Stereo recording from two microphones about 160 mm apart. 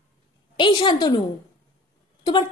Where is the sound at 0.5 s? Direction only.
30° left (ahead or behind).